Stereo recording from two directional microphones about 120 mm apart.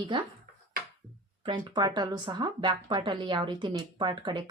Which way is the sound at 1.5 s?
40° right (ahead or behind).